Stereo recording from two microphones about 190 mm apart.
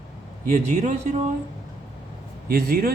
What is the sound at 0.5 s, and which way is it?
Speech, 35° right (ahead or behind).